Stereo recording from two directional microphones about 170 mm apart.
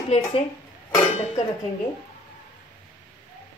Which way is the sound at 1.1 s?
40° left (ahead or behind).